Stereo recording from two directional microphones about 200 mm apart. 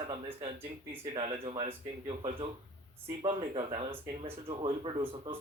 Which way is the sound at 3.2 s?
25° right (ahead or behind).